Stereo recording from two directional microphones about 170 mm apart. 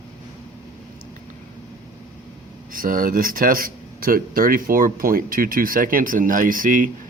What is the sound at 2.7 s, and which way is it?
Speech, 55° right (ahead or behind).